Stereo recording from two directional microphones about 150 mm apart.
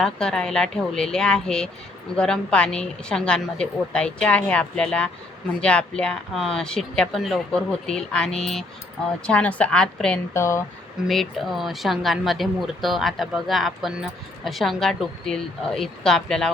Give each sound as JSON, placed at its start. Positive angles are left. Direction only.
{"t": 0.0, "sound": "a woman's voice", "side_deg": 5}
{"t": 10.3, "sound": "speech", "side_deg": 20}
{"t": 11.1, "sound": "a woman's voice", "side_deg": 0}